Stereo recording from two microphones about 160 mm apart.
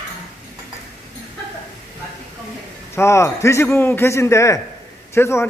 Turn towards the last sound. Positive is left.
turn(degrees=15)  # may be behind; listen again after turning